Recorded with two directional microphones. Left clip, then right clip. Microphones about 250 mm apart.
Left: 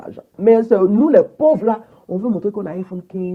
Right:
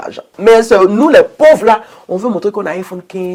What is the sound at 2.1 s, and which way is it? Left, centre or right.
Speech, right.